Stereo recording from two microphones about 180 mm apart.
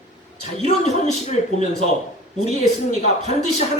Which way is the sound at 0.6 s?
40° left (ahead or behind).